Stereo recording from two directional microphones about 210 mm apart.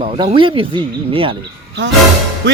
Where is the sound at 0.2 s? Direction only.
25° right (ahead or behind).